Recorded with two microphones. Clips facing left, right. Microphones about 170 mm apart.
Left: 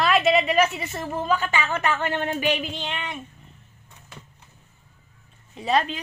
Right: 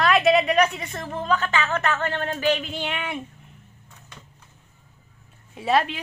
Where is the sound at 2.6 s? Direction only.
5° right (ahead or behind).